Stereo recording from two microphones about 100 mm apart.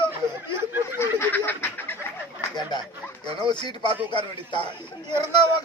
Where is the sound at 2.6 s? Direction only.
50° left (ahead or behind).